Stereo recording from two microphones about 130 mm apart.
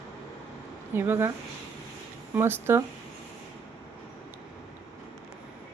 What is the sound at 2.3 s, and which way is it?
Speech, 15° right (ahead or behind).